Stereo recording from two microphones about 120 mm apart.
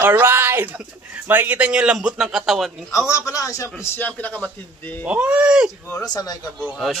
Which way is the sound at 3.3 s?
25° left (ahead or behind).